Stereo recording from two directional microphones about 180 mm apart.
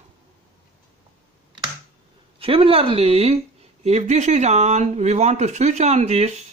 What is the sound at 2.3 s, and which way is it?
Speech, 30° right (ahead or behind).